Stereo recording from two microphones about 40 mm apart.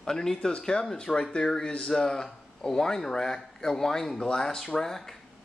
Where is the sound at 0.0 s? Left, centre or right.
Centre.